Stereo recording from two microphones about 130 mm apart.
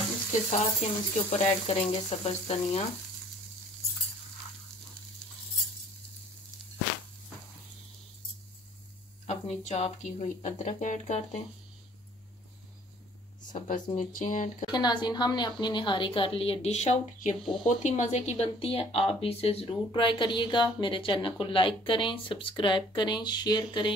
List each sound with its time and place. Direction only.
0.3 s a woman's voice: 65° left (ahead or behind)
9.2 s speech: 60° left (ahead or behind)
13.5 s speech: 75° left (ahead or behind)
14.7 s a woman's voice: 35° left (ahead or behind); by 19.6 s 50° left (ahead or behind)
19.9 s a woman's voice: 40° left (ahead or behind)